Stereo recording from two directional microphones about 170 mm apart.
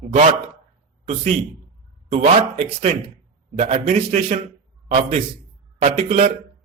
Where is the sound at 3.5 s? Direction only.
45° right (ahead or behind).